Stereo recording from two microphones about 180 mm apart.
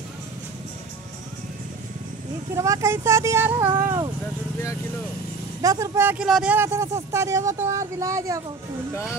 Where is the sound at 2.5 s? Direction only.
15° right (ahead or behind).